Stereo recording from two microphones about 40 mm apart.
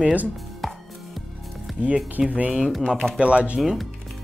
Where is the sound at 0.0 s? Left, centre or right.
Right.